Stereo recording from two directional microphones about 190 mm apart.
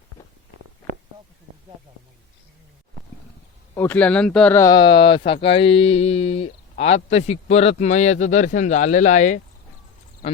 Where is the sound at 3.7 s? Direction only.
10° left (ahead or behind); by 9.4 s 40° left (ahead or behind).